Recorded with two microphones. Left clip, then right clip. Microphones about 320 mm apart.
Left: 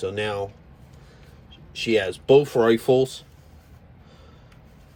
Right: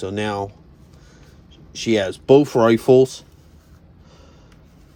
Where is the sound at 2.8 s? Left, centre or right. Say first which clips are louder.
Right 6 dB; right.